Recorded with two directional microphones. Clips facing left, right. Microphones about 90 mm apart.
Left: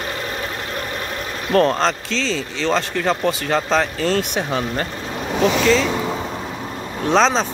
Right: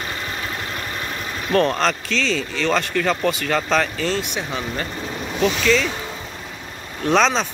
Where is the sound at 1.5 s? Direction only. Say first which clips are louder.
Left 2 dB; 30° left (ahead or behind).